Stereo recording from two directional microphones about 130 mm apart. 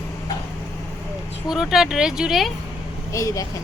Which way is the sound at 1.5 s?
5° right (ahead or behind).